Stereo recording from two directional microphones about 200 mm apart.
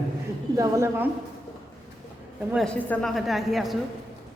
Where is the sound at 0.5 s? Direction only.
15° right (ahead or behind).